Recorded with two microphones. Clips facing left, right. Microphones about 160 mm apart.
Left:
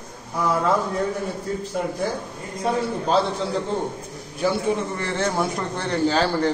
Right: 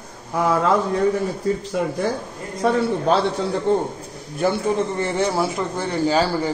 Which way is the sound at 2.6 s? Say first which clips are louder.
Right 4 dB; 80° right.